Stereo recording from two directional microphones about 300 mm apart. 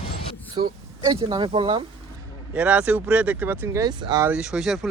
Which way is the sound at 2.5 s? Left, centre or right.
Centre.